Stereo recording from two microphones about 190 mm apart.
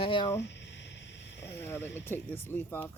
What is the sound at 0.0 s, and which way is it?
Speech, 30° left (ahead or behind).